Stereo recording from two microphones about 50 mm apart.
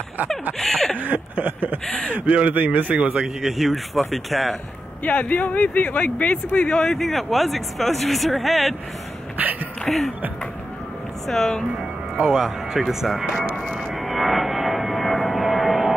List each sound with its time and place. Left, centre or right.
0.6 s a sound: centre
0.9 s a sound: right
2.2 s a man's voice: right
3.2 s speech: centre
5.0 s speech: left
6.7 s speech: centre
9.4 s a sound: right
9.8 s speech: centre
11.2 s speech: centre
12.2 s speech: centre
13.6 s music: centre
13.9 s a sound: centre